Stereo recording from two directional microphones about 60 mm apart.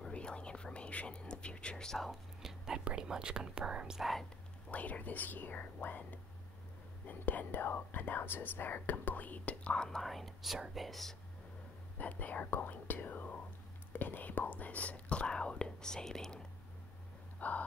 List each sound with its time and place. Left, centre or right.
0.1 s whispering: centre
2.4 s whispering: centre
2.8 s speech: centre
4.0 s speech: centre
4.6 s speech: left
9.8 s speech: centre
12.0 s speech: left; by 16.3 s centre
17.4 s a sound: left